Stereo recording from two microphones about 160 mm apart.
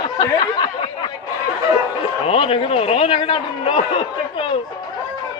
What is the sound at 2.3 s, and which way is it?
A man's voice, 35° left (ahead or behind).